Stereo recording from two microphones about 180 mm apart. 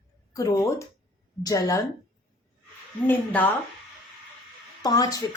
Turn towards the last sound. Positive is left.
turn(degrees=20)  # may be behind; listen again after turning